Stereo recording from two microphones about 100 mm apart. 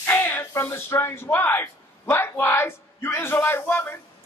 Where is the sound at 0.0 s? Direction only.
20° left (ahead or behind).